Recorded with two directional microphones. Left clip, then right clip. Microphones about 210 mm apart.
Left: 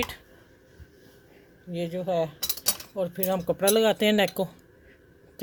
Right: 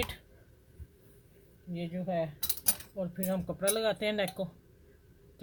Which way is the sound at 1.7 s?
35° left (ahead or behind).